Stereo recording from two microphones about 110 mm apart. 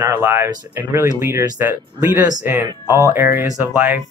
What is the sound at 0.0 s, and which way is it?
Speech, 25° right (ahead or behind).